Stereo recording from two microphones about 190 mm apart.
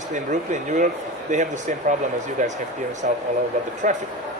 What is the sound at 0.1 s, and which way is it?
Speech, 40° right (ahead or behind).